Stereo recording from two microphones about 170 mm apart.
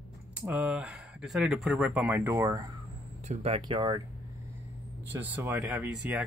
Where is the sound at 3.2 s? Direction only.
40° right (ahead or behind).